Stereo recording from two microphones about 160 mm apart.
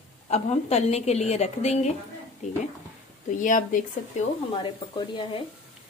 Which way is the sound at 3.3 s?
55° left (ahead or behind).